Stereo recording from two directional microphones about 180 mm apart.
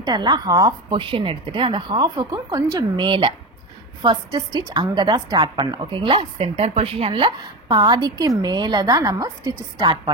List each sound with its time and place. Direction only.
0.0 s a woman's voice: 25° right (ahead or behind)